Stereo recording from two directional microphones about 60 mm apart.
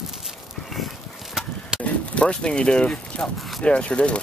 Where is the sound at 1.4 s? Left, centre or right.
Centre.